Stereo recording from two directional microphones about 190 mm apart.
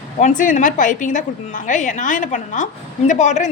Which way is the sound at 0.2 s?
40° left (ahead or behind).